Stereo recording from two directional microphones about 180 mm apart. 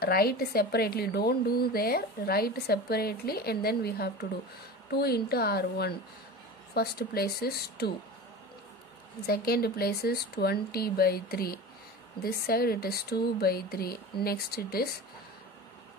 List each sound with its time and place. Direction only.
0.0 s a woman's voice: 60° left (ahead or behind)
9.2 s a woman's voice: 60° left (ahead or behind)